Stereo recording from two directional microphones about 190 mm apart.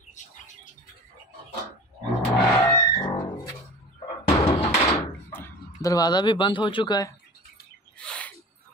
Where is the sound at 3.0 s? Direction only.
25° left (ahead or behind).